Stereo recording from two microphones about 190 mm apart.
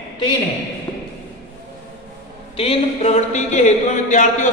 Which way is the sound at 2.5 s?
30° left (ahead or behind).